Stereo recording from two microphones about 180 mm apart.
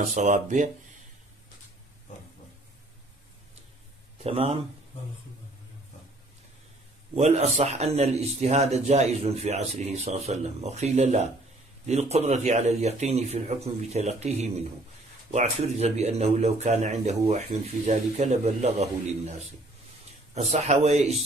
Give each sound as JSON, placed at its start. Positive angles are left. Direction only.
{"t": 0.0, "sound": "speech", "side_deg": -45}
{"t": 4.2, "sound": "speech", "side_deg": -35}
{"t": 7.2, "sound": "a man's voice", "side_deg": -35}